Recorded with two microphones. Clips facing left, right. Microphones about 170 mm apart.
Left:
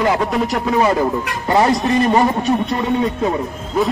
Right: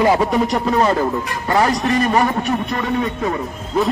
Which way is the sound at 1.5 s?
25° left (ahead or behind).